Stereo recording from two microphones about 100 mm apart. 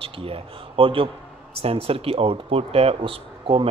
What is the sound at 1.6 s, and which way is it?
Speech, 75° right (ahead or behind).